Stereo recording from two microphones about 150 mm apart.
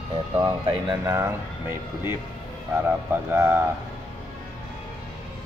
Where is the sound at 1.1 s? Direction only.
20° right (ahead or behind).